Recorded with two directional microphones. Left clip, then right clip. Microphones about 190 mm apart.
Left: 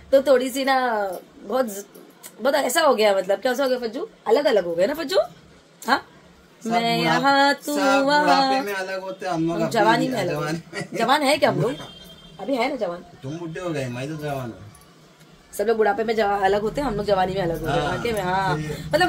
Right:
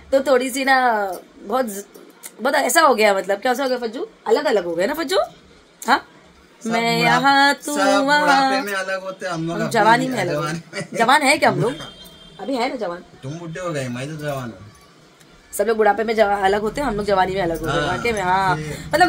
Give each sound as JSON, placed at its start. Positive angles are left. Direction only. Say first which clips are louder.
{"t": 0.1, "sound": "a woman's voice", "louder": "even", "side_deg": -20}
{"t": 6.6, "sound": "a woman's voice", "louder": "right 3 dB", "side_deg": -25}
{"t": 7.7, "sound": "a man's voice", "louder": "right 2 dB", "side_deg": 5}
{"t": 8.1, "sound": "a woman's voice", "louder": "right 2 dB", "side_deg": -25}
{"t": 8.7, "sound": "a man's voice", "louder": "right 4 dB", "side_deg": 5}
{"t": 9.7, "sound": "a woman's voice", "louder": "right 5 dB", "side_deg": -25}
{"t": 10.3, "sound": "a man's voice", "louder": "right 3 dB", "side_deg": 5}
{"t": 11.0, "sound": "a woman's voice", "louder": "right 4 dB", "side_deg": -25}
{"t": 13.2, "sound": "a man's voice", "louder": "right 2 dB", "side_deg": 10}
{"t": 15.5, "sound": "a woman's voice", "louder": "right 3 dB", "side_deg": -20}